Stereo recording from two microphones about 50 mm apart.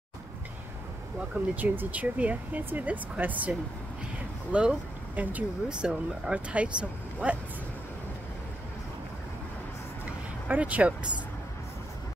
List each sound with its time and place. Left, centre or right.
1.5 s speech: right
4.5 s speech: right
5.1 s speech: right
5.7 s speech: centre
10.5 s speech: right